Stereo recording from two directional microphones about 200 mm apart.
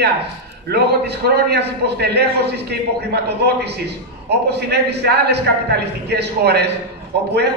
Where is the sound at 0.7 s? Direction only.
55° right (ahead or behind).